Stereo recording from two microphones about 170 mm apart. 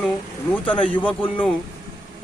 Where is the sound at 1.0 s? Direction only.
10° left (ahead or behind).